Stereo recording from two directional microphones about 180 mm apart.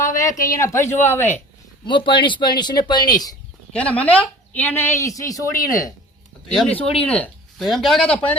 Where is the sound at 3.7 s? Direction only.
5° left (ahead or behind).